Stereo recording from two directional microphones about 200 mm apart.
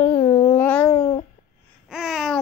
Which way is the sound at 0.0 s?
30° left (ahead or behind).